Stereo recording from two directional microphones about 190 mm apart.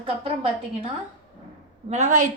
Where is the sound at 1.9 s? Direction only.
40° right (ahead or behind).